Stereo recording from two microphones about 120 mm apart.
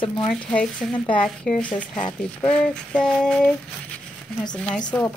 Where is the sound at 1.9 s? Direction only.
40° left (ahead or behind).